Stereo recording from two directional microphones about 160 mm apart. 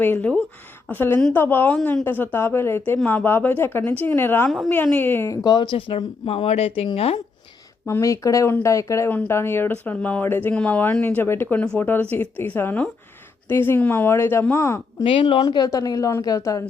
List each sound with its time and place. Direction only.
0.0 s a woman's voice: 10° left (ahead or behind)
4.4 s a woman's voice: centre (ahead or behind)
4.7 s a woman's voice: 10° left (ahead or behind)
5.4 s speech: 25° left (ahead or behind)
7.9 s a woman's voice: 15° left (ahead or behind)
15.0 s speech: 35° left (ahead or behind)
15.6 s a woman's voice: 25° left (ahead or behind)